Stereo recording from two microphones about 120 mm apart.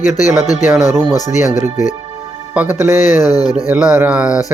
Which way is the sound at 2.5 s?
15° right (ahead or behind).